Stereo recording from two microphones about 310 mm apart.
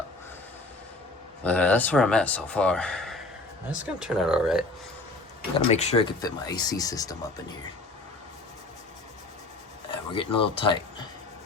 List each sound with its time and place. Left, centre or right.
1.5 s speech: centre
5.5 s speech: centre
10.2 s speech: centre